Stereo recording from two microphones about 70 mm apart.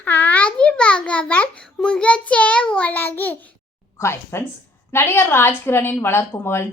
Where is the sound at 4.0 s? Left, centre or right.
Left.